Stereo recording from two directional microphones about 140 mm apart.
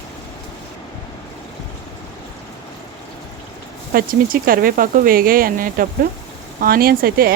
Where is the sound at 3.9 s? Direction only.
90° right.